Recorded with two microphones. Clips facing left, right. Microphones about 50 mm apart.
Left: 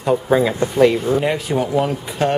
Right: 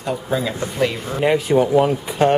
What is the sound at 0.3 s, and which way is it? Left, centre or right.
Speech, left.